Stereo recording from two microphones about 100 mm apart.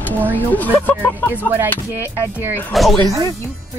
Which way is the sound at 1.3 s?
20° right (ahead or behind).